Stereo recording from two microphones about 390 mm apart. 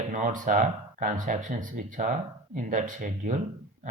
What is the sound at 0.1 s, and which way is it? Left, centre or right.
Speech, centre.